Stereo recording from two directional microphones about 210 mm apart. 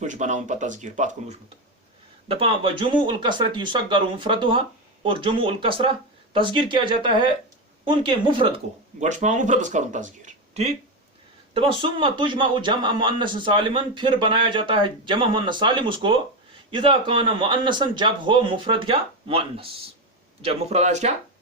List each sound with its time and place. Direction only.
0.0 s speech: 35° right (ahead or behind)
2.2 s a man's voice: 25° right (ahead or behind)